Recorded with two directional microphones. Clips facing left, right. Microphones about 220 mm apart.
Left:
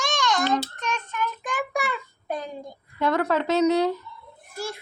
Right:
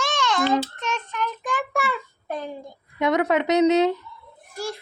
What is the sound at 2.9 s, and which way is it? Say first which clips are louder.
A woman's voice: right 2 dB; 20° right (ahead or behind).